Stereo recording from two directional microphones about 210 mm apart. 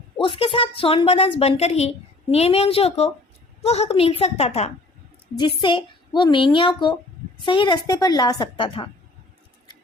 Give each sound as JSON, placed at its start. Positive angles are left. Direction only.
{"t": 0.2, "sound": "a woman's voice", "side_deg": 25}